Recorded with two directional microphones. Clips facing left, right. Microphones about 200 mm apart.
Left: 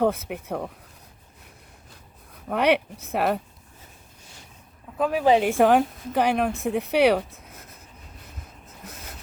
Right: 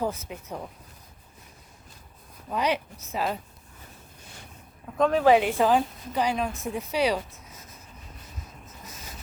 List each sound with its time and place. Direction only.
0.0 s a woman's voice: 65° left (ahead or behind)
2.5 s a woman's voice: 65° left (ahead or behind)
4.9 s a woman's voice: 10° left (ahead or behind)
5.4 s a woman's voice: 50° left (ahead or behind)
8.8 s a sound: 60° left (ahead or behind)